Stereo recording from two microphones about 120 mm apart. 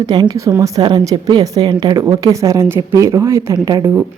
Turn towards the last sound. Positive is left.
turn(degrees=-25)  # may be behind; listen again after turning